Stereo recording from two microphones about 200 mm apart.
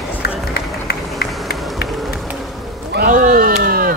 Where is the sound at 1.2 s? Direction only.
50° left (ahead or behind).